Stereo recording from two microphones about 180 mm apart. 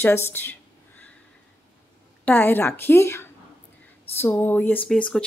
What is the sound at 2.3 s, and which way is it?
A woman's voice, 10° left (ahead or behind).